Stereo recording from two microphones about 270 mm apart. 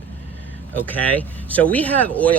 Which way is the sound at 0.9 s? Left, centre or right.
Centre.